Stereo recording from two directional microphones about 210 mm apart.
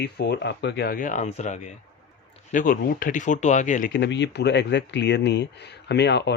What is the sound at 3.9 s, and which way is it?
Speech, 60° left (ahead or behind).